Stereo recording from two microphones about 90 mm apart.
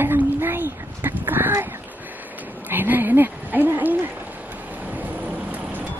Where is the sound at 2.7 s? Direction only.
20° right (ahead or behind).